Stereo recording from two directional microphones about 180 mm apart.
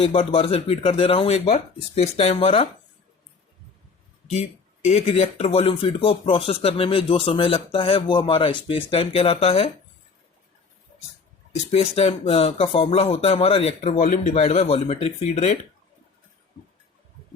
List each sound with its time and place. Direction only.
0.0 s speech: 35° left (ahead or behind)
4.3 s speech: 40° left (ahead or behind)
11.5 s speech: 35° left (ahead or behind)